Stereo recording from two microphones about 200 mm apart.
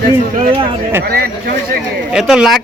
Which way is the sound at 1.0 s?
50° right (ahead or behind).